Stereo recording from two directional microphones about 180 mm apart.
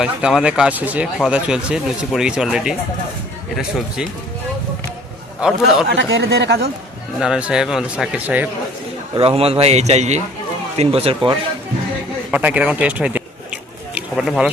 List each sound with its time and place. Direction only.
0.0 s speech: 5° right (ahead or behind)
5.4 s speech: 5° right (ahead or behind)
5.9 s speech: 85° right; by 6.7 s 65° right (ahead or behind)
7.2 s speech: 5° right (ahead or behind)
9.1 s a man's voice: 30° right (ahead or behind)
12.3 s speech: 5° right (ahead or behind)
13.9 s a sound: 5° right (ahead or behind)